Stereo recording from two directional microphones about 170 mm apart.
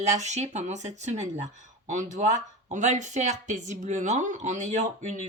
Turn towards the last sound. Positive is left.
turn(degrees=-45)  # may be behind; listen again after turning